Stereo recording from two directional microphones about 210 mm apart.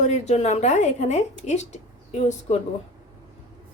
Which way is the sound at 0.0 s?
35° left (ahead or behind).